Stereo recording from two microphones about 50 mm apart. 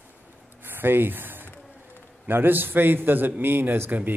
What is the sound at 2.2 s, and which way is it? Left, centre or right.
A man's voice, right.